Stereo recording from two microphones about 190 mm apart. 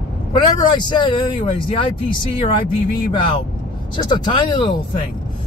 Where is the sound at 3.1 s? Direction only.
25° left (ahead or behind).